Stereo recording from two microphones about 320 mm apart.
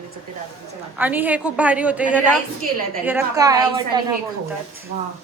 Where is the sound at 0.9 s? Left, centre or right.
Centre.